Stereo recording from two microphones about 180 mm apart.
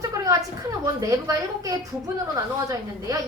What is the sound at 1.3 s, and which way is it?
A woman's voice, 20° right (ahead or behind).